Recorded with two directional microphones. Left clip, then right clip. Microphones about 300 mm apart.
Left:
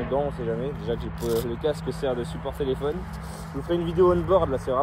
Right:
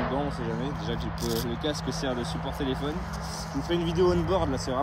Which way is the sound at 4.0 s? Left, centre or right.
Centre.